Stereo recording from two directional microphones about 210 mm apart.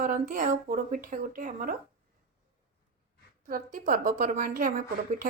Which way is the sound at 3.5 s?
40° right (ahead or behind).